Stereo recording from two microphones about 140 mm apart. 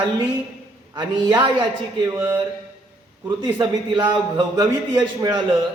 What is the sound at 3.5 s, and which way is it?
Speech, 35° right (ahead or behind).